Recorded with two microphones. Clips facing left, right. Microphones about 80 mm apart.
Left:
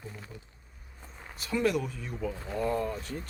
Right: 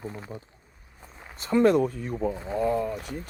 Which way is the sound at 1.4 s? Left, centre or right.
Right.